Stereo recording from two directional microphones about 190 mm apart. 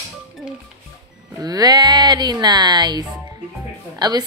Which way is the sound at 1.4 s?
20° right (ahead or behind).